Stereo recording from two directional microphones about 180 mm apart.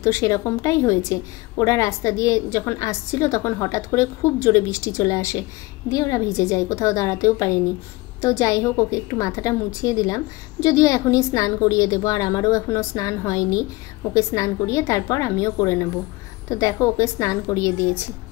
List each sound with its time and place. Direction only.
0.0 s a woman's voice: 15° left (ahead or behind)